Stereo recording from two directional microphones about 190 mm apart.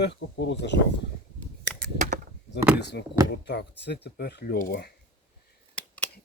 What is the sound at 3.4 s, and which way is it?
Speech, 60° left (ahead or behind).